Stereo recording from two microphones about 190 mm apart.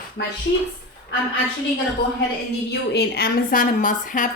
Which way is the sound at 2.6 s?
60° left (ahead or behind).